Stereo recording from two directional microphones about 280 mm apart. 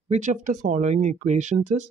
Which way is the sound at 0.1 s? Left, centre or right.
Right.